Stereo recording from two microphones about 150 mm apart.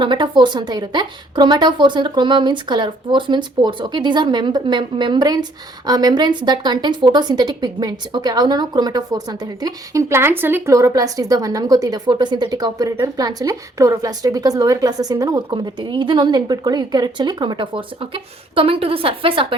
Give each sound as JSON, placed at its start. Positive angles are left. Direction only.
{"t": 0.0, "sound": "a woman's voice", "side_deg": -30}